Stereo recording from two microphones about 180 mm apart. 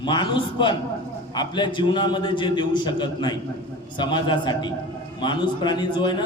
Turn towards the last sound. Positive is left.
turn(degrees=25)  # may be behind; listen again after turning